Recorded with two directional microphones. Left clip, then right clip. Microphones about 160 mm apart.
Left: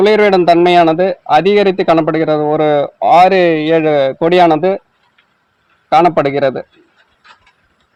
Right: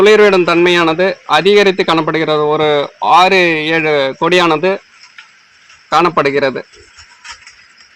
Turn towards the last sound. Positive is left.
turn(degrees=60)  # may be behind; listen again after turning